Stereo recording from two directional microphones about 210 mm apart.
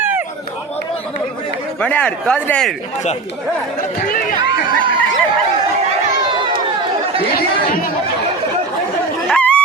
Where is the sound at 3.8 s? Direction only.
40° left (ahead or behind).